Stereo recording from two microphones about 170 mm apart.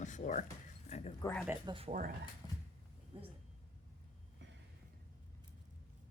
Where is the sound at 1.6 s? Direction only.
30° right (ahead or behind).